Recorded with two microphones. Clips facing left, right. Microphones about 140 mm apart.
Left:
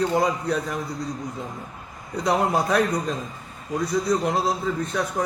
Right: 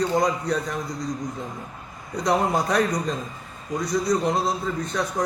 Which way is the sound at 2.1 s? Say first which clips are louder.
Even; 5° left (ahead or behind).